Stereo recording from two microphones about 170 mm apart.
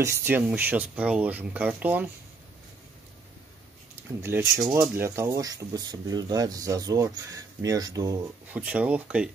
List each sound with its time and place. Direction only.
0.2 s speech: 10° right (ahead or behind)
4.2 s speech: 15° right (ahead or behind)
8.5 s speech: 5° right (ahead or behind)